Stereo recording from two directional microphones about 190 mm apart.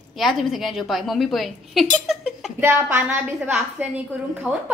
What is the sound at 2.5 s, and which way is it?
A woman's voice, 10° right (ahead or behind).